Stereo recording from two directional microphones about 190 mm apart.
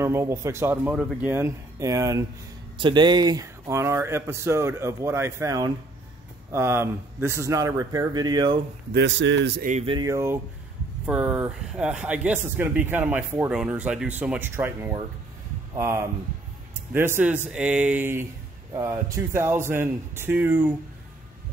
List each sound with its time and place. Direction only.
0.0 s speech: 15° right (ahead or behind)
8.9 s speech: 70° right (ahead or behind)
9.6 s speech: 40° right (ahead or behind)
9.8 s a man's voice: 20° right (ahead or behind)